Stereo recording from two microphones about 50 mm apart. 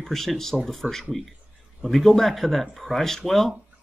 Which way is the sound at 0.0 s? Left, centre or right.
Centre.